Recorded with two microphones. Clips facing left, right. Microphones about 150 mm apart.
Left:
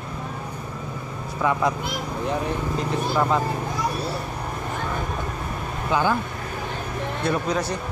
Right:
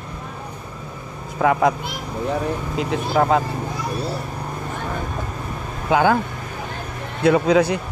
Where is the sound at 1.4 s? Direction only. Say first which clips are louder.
Right 5 dB; 60° right (ahead or behind).